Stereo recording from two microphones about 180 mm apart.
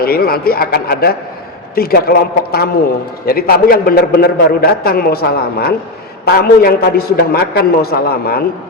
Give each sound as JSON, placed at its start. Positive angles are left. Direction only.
{"t": 0.0, "sound": "a man's voice", "side_deg": 55}